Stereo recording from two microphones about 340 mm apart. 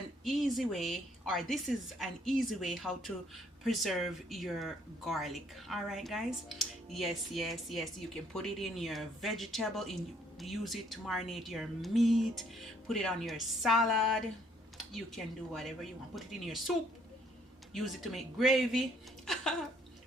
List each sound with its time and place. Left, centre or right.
0.3 s a woman's voice: centre
17.7 s a woman's voice: centre